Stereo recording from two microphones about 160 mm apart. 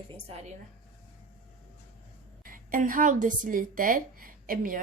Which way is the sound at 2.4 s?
60° right (ahead or behind).